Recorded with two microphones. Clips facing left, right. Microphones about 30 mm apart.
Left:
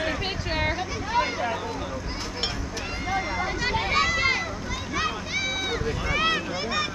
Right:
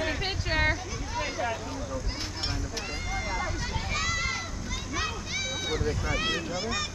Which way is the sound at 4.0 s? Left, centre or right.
Left.